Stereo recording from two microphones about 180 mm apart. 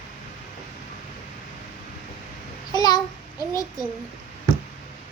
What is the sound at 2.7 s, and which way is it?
Child singing, 20° left (ahead or behind).